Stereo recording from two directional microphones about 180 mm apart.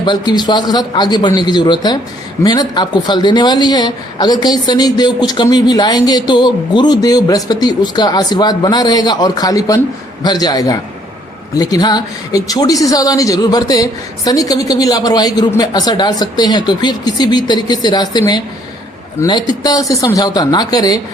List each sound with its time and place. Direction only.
0.0 s a man's voice: 25° left (ahead or behind)